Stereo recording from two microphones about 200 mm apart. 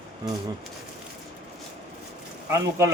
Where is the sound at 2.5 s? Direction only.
15° right (ahead or behind).